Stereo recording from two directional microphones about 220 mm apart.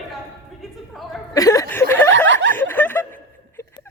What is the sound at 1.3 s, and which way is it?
Speech, 15° left (ahead or behind).